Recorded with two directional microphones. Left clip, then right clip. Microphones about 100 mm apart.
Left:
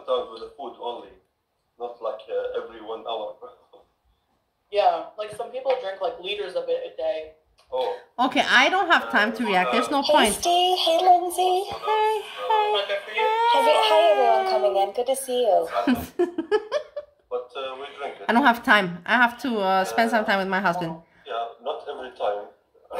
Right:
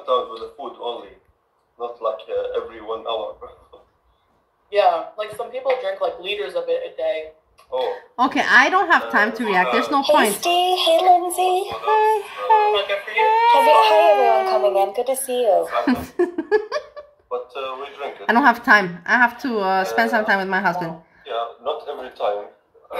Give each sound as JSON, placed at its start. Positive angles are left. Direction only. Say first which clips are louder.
{"t": 0.0, "sound": "a sound", "louder": "right 5 dB", "side_deg": -10}
{"t": 4.8, "sound": "speech", "louder": "right 4 dB", "side_deg": -5}
{"t": 10.9, "sound": "synthetic singing", "louder": "right 4 dB", "side_deg": -30}
{"t": 11.7, "sound": "speech", "louder": "right 5 dB", "side_deg": -5}
{"t": 16.6, "sound": "chuckle", "louder": "right 1 dB", "side_deg": 0}